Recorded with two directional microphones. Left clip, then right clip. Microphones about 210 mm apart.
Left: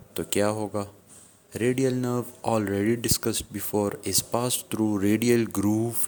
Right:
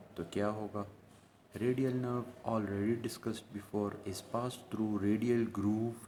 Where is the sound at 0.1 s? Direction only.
40° left (ahead or behind).